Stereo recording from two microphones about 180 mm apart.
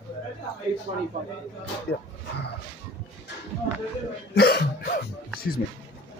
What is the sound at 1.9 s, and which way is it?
Speech, 65° left (ahead or behind).